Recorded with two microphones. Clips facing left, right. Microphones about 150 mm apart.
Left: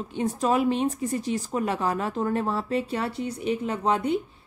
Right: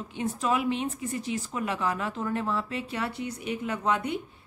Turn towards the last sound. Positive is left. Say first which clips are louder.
# left 4 dB
turn(degrees=30)  # may be behind; listen again after turning